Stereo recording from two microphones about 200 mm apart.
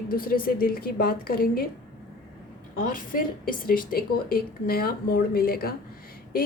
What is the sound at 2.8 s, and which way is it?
Speech, 45° left (ahead or behind).